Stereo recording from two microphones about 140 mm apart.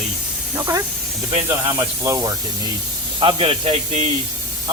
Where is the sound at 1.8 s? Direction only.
20° right (ahead or behind).